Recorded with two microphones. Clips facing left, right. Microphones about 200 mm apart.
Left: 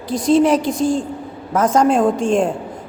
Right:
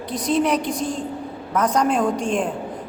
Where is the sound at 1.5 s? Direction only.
45° left (ahead or behind).